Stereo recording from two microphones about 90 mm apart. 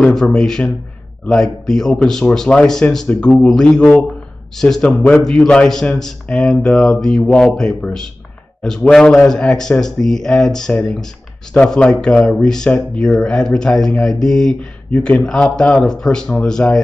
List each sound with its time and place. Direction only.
0.0 s speech: 5° left (ahead or behind)